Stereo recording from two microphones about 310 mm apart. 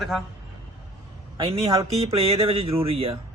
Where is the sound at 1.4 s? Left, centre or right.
Centre.